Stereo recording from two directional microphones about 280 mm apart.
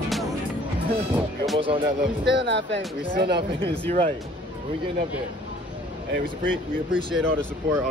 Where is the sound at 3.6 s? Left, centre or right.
Right.